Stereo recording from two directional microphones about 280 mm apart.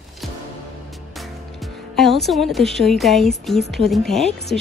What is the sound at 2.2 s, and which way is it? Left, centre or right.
Speech, centre.